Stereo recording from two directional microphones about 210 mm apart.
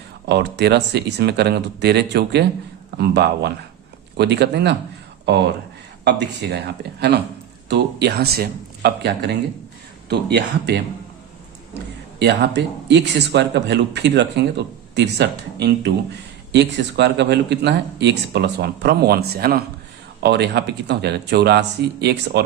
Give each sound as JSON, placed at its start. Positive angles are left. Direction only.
{"t": 0.3, "sound": "speech", "side_deg": -55}
{"t": 6.1, "sound": "speech", "side_deg": -55}
{"t": 7.7, "sound": "speech", "side_deg": -50}
{"t": 12.2, "sound": "speech", "side_deg": -55}